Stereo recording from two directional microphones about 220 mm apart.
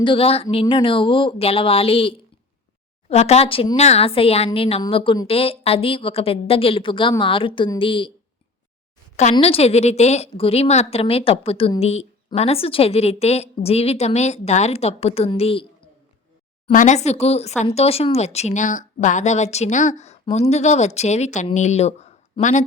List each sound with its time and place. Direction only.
0.0 s a woman's voice: 25° left (ahead or behind)
9.3 s a woman's voice: 25° left (ahead or behind)
16.7 s speech: 35° left (ahead or behind)